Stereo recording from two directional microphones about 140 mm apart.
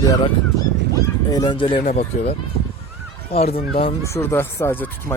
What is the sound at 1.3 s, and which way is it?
Speech, 35° left (ahead or behind).